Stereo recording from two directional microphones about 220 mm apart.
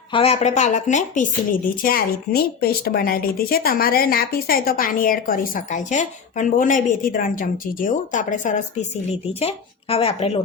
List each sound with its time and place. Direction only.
0.1 s a woman's voice: 25° left (ahead or behind)